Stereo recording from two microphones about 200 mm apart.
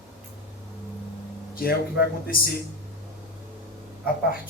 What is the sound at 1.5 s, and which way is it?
Speech, 50° left (ahead or behind).